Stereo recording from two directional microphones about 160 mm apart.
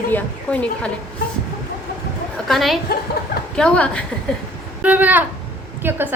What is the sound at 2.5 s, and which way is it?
A woman's voice, centre (ahead or behind).